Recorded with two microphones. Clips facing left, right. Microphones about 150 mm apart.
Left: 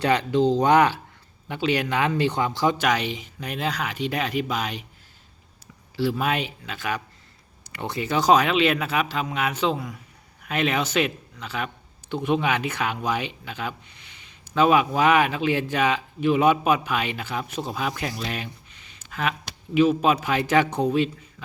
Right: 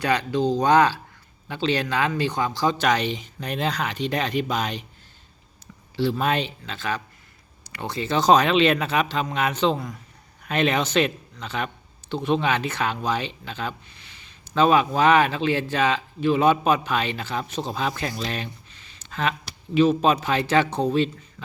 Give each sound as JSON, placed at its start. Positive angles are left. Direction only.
{"t": 0.0, "sound": "speech", "side_deg": 20}
{"t": 2.8, "sound": "speech", "side_deg": 10}
{"t": 6.0, "sound": "speech", "side_deg": 5}